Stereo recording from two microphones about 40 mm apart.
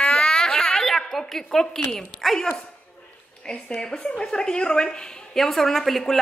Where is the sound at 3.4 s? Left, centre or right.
Left.